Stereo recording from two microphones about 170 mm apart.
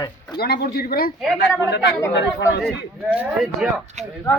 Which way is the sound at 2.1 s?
90° left.